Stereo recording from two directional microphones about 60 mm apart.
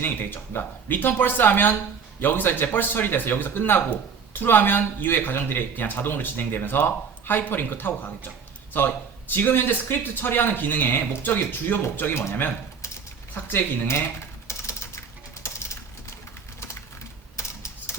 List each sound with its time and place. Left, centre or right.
0.0 s speech: left
9.3 s speech: left
13.3 s speech: left
14.4 s typing: left
15.4 s pigeon: left
17.3 s typewriter: left